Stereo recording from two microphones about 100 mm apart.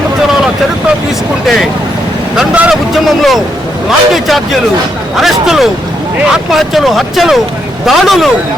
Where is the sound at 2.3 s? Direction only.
5° right (ahead or behind).